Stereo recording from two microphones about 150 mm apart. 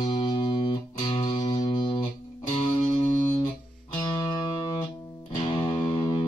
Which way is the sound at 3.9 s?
30° left (ahead or behind).